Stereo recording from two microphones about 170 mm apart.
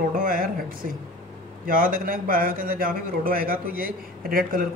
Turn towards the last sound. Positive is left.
turn(degrees=-55)  # may be behind; listen again after turning